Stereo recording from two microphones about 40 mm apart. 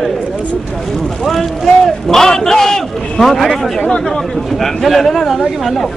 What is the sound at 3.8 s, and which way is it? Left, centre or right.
Speech, left.